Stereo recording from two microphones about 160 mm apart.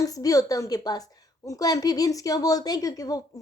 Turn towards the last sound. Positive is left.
turn(degrees=20)  # may be behind; listen again after turning